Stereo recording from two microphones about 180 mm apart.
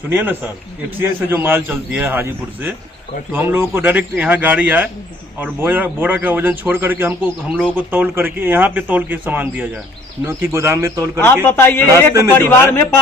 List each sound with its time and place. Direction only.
0.1 s a man's voice: 10° right (ahead or behind)
11.5 s a man's voice: 15° left (ahead or behind)